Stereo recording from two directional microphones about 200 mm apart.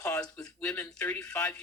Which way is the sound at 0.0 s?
15° left (ahead or behind).